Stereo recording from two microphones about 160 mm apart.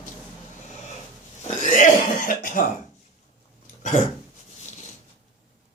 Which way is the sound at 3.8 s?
50° left (ahead or behind).